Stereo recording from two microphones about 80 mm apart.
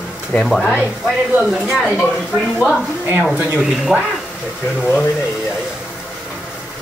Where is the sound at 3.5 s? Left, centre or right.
Centre.